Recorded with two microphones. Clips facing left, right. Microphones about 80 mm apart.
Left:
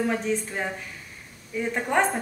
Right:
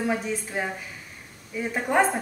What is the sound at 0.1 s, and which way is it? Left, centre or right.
A woman's voice, centre.